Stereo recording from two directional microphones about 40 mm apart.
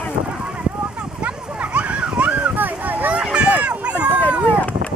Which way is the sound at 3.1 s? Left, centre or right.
Right.